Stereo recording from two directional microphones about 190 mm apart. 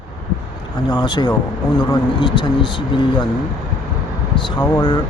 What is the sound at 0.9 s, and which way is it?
Speech, 20° left (ahead or behind).